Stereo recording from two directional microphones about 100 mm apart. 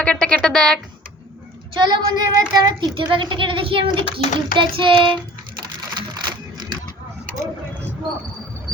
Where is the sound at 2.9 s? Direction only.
55° right (ahead or behind).